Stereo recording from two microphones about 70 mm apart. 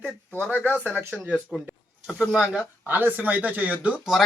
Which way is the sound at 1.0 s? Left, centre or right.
Right.